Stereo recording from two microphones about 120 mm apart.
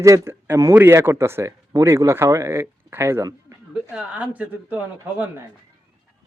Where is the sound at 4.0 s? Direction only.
10° right (ahead or behind).